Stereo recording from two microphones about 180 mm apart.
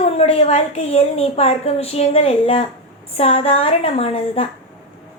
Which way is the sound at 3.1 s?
35° left (ahead or behind).